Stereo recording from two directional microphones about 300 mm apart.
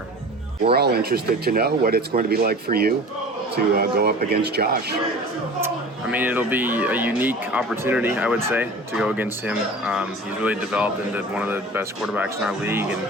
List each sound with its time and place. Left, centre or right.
0.6 s speech: right
5.5 s speech: centre